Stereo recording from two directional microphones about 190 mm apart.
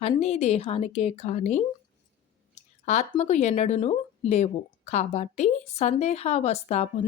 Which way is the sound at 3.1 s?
35° left (ahead or behind).